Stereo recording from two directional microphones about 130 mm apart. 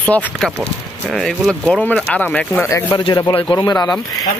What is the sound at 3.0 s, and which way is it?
Speech, 40° left (ahead or behind).